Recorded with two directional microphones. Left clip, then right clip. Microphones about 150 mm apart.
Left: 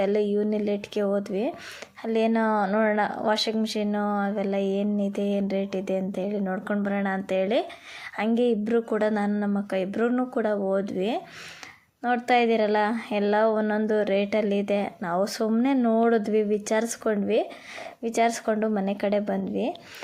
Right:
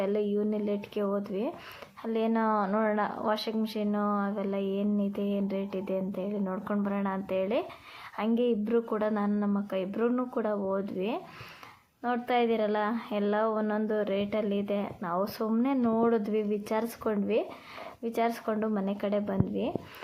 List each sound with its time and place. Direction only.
0.0 s a woman's voice: 30° left (ahead or behind)